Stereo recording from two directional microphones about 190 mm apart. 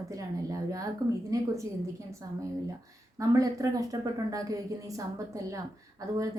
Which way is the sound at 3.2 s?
20° right (ahead or behind).